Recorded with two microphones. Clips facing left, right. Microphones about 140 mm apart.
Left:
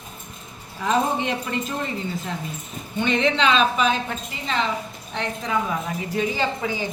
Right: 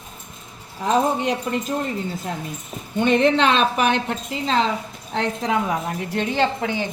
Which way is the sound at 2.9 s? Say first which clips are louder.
Right 4 dB; 50° right (ahead or behind).